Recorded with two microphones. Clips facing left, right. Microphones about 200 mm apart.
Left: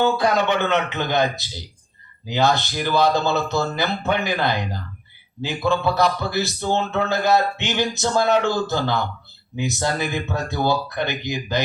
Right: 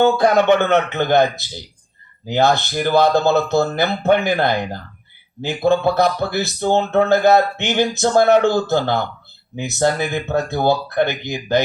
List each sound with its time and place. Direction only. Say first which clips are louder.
0.0 s speech: right 5 dB; 50° right (ahead or behind)
2.2 s speech: right 3 dB; 50° right (ahead or behind)